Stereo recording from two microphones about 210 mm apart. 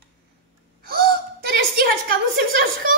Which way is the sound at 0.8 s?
45° right (ahead or behind).